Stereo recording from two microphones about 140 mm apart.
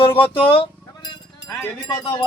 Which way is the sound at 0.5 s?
35° left (ahead or behind).